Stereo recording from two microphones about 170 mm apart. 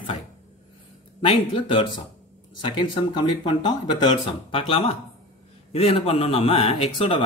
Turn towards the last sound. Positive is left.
turn(degrees=35)  # may be behind; listen again after turning